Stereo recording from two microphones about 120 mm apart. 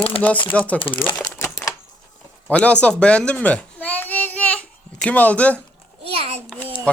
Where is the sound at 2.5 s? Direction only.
10° left (ahead or behind).